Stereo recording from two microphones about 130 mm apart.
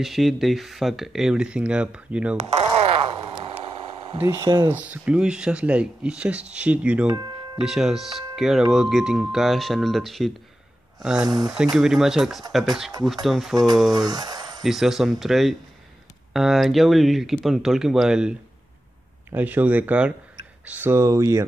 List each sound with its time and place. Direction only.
0.0 s speech: centre (ahead or behind)
4.2 s speech: 20° right (ahead or behind); by 14.0 s centre (ahead or behind)
14.0 s speech: 30° right (ahead or behind)
14.6 s speech: centre (ahead or behind)
19.3 s speech: 10° right (ahead or behind)